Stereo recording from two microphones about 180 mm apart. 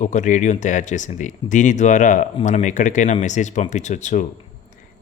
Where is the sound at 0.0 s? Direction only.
40° left (ahead or behind).